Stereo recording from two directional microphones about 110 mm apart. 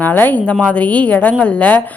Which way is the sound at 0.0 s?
15° left (ahead or behind).